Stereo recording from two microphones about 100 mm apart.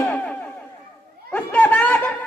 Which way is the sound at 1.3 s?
15° left (ahead or behind).